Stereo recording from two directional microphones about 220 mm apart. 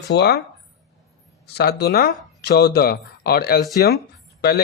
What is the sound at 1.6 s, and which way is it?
Speech, 45° left (ahead or behind).